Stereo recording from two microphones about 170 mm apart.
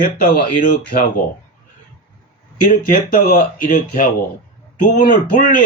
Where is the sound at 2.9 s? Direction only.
55° left (ahead or behind).